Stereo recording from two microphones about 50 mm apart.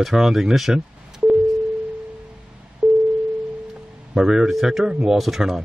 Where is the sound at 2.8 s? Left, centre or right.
Right.